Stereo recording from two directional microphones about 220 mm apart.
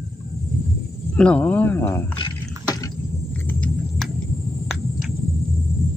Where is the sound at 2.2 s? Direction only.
20° left (ahead or behind).